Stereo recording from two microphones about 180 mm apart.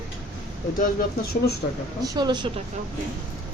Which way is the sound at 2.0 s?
25° right (ahead or behind).